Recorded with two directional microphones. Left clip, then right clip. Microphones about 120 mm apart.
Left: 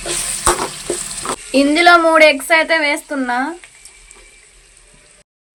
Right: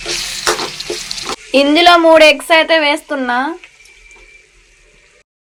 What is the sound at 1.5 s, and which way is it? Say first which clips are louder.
Speech: right 2 dB; 20° right (ahead or behind).